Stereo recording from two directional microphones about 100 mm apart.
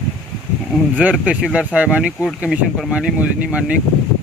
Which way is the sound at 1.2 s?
10° right (ahead or behind).